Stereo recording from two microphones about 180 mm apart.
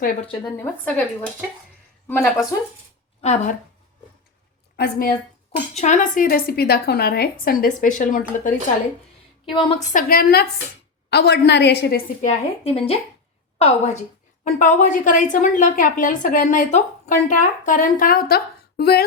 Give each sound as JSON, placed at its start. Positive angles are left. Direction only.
{"t": 0.5, "sound": "speech", "side_deg": 5}
{"t": 3.2, "sound": "speech", "side_deg": 40}
{"t": 4.8, "sound": "speech", "side_deg": 55}
{"t": 5.7, "sound": "speech", "side_deg": 40}
{"t": 7.4, "sound": "a woman's voice", "side_deg": 50}
{"t": 9.6, "sound": "a woman's voice", "side_deg": 30}
{"t": 9.9, "sound": "speech", "side_deg": 55}
{"t": 11.1, "sound": "a woman's voice", "side_deg": 65}
{"t": 12.6, "sound": "a woman's voice", "side_deg": 35}